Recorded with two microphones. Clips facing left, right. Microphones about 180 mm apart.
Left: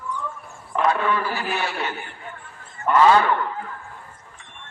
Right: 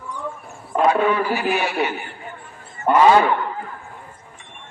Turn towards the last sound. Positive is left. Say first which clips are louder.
# right 2 dB
turn(degrees=-15)  # may be behind; listen again after turning